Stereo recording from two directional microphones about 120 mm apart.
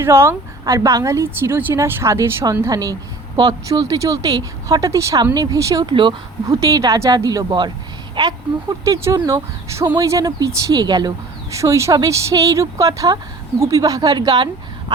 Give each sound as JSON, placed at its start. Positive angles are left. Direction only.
{"t": 0.0, "sound": "a woman's voice", "side_deg": -20}
{"t": 5.8, "sound": "speech", "side_deg": -45}
{"t": 6.5, "sound": "speech", "side_deg": -30}
{"t": 8.8, "sound": "a woman's voice", "side_deg": -25}
{"t": 11.5, "sound": "a woman's voice", "side_deg": -25}